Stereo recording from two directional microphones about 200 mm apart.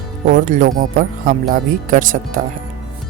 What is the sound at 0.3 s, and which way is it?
Speech, 40° right (ahead or behind).